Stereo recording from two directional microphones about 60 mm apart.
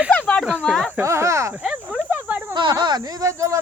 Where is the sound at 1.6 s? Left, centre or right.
Centre.